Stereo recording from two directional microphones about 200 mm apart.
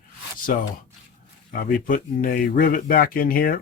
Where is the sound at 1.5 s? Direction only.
45° left (ahead or behind).